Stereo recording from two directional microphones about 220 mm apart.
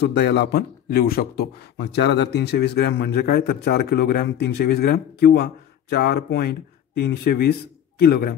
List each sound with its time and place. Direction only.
0.0 s speech: 50° left (ahead or behind)